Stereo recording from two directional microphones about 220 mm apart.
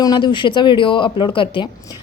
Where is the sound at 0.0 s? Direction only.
20° left (ahead or behind).